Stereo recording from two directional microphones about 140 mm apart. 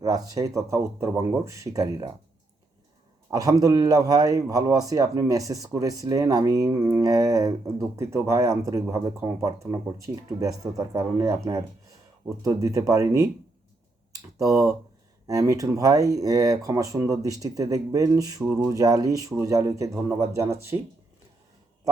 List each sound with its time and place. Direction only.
0.0 s a man's voice: 25° right (ahead or behind)
3.2 s a man's voice: 25° right (ahead or behind)